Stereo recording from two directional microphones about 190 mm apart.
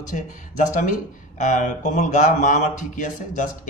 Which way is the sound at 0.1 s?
40° left (ahead or behind).